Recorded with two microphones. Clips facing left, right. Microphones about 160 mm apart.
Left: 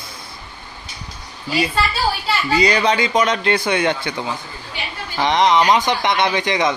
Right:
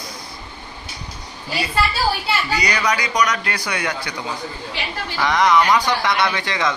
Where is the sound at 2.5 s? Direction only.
25° left (ahead or behind).